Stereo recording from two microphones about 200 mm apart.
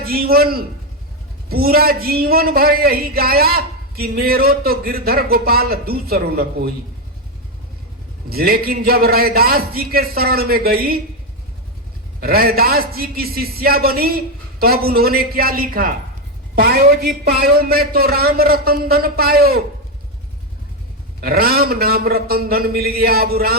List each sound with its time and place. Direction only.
0.0 s a man's voice: 50° right (ahead or behind)
8.3 s a man's voice: 50° right (ahead or behind)
12.2 s a man's voice: 50° right (ahead or behind)
21.2 s a man's voice: 50° right (ahead or behind)